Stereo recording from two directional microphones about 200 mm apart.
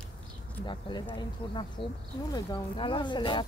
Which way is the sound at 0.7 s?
25° left (ahead or behind).